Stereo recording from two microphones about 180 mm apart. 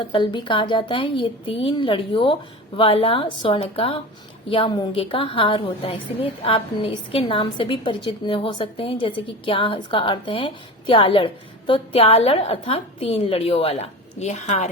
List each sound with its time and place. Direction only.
0.0 s a woman's voice: 25° left (ahead or behind)